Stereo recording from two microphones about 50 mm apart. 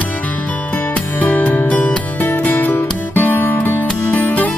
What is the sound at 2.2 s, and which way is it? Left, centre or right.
Music, left.